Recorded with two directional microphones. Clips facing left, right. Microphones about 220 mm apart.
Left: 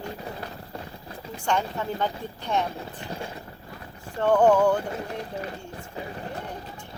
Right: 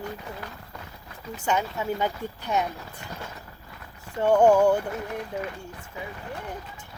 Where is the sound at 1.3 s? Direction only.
5° right (ahead or behind).